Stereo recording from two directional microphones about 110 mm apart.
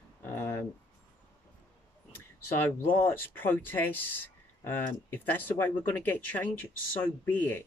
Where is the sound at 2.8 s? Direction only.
20° left (ahead or behind).